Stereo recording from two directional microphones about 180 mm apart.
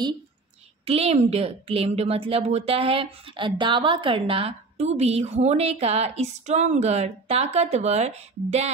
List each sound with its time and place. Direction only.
0.8 s speech: 35° right (ahead or behind)